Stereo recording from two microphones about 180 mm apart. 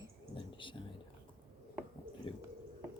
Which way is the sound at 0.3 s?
25° left (ahead or behind).